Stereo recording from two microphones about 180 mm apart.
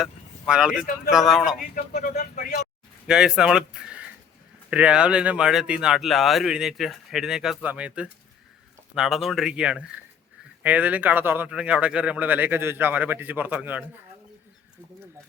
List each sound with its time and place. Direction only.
0.0 s vehicle: 5° right (ahead or behind)
1.1 s speech: centre (ahead or behind)
1.7 s speech: 45° left (ahead or behind)
3.1 s speech: 5° right (ahead or behind)